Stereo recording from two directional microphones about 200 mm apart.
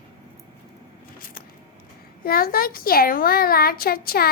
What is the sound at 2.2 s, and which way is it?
A woman's voice, 45° left (ahead or behind).